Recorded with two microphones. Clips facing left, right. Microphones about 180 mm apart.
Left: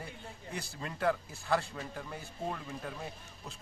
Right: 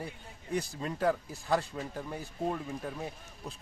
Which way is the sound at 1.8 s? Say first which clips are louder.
Right 4 dB; 20° right (ahead or behind).